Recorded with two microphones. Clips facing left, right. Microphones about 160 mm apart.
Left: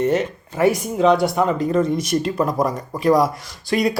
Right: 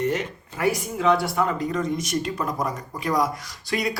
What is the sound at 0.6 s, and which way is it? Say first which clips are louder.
Speech: left 6 dB; 20° left (ahead or behind).